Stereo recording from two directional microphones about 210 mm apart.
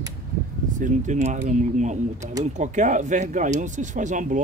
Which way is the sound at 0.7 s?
35° right (ahead or behind).